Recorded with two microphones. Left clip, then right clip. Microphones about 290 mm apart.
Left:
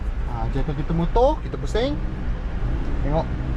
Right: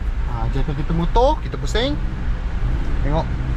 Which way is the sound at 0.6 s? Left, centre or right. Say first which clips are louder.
Right 1 dB; centre.